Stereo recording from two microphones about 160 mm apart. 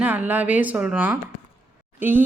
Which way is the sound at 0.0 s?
10° right (ahead or behind).